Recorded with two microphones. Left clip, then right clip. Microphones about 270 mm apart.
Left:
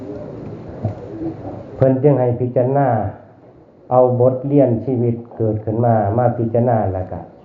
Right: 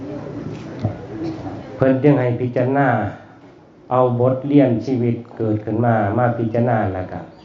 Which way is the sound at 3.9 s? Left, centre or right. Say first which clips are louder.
Left 3 dB; right.